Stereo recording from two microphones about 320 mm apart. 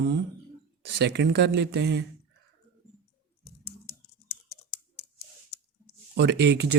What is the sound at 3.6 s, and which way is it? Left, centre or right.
Typing, left.